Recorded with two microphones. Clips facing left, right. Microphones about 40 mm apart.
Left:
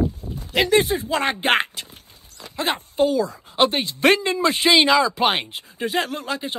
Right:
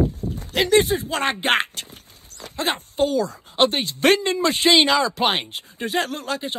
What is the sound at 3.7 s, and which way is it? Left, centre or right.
A man's voice, left.